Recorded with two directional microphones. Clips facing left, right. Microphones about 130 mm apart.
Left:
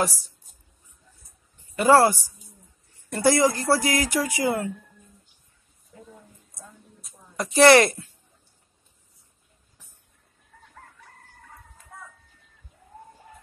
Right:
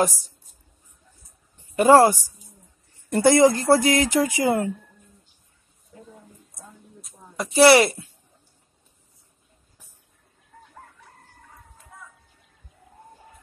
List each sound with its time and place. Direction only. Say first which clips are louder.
1.8 s speech: right 3 dB; 20° right (ahead or behind)
7.3 s speech: right 1 dB; 5° right (ahead or behind)